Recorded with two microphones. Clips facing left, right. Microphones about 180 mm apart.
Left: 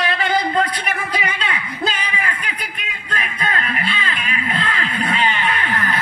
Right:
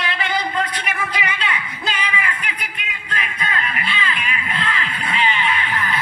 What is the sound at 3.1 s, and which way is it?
Music, 40° left (ahead or behind).